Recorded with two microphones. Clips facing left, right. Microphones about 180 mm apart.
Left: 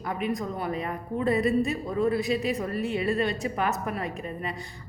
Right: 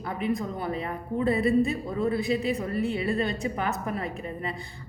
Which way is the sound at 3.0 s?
25° right (ahead or behind).